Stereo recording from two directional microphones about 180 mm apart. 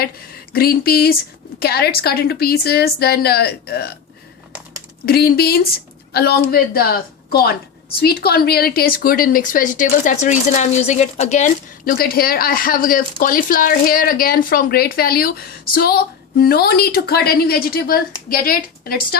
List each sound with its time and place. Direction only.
0.5 s a woman's voice: 60° left (ahead or behind)
5.0 s a woman's voice: 60° left (ahead or behind)